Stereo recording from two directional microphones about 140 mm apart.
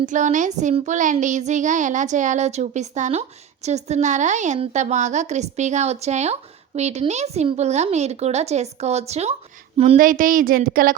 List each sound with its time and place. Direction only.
0.0 s a child's voice: 60° right (ahead or behind); by 10.0 s 45° right (ahead or behind)
10.0 s speech: 75° right (ahead or behind)